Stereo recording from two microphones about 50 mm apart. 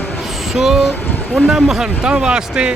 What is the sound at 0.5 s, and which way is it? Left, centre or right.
Speech, centre.